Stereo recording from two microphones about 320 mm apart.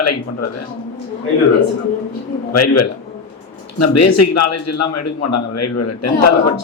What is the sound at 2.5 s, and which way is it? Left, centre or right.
A man's voice, left.